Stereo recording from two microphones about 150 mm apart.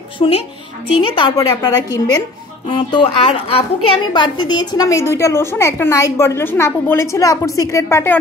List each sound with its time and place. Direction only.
0.2 s a woman's voice: 40° left (ahead or behind)
1.3 s a woman's voice: 25° left (ahead or behind)